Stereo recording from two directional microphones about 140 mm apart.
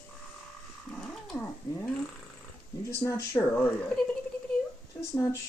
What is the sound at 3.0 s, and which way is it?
Speech, 20° left (ahead or behind).